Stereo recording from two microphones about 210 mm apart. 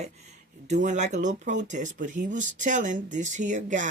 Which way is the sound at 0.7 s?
35° right (ahead or behind).